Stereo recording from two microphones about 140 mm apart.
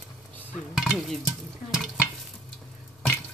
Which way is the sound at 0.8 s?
Centre (ahead or behind).